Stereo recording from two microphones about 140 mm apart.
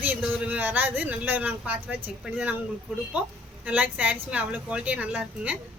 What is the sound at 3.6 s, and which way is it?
A woman's voice, 10° right (ahead or behind).